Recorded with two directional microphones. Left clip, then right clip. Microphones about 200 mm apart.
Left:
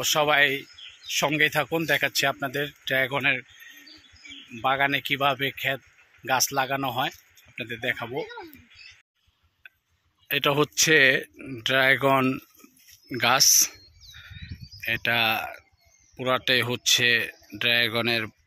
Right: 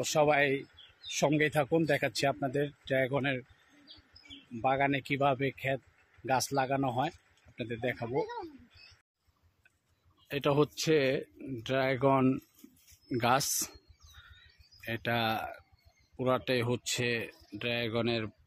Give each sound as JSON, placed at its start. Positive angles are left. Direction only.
{"t": 0.0, "sound": "speech", "side_deg": 0}
{"t": 4.6, "sound": "speech", "side_deg": 0}
{"t": 8.0, "sound": "speech", "side_deg": 30}
{"t": 10.2, "sound": "speech", "side_deg": 5}
{"t": 13.1, "sound": "speech", "side_deg": -10}
{"t": 14.9, "sound": "speech", "side_deg": -5}